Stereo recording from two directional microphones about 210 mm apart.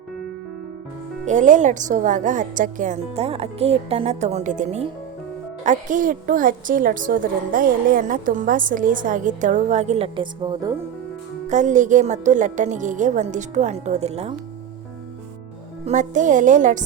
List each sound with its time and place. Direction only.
1.3 s a woman's voice: 35° right (ahead or behind); by 10.8 s 20° right (ahead or behind)
11.4 s a woman's voice: 35° right (ahead or behind)
15.9 s a woman's voice: 35° right (ahead or behind)